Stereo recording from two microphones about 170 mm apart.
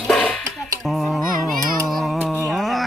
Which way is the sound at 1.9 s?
Centre (ahead or behind).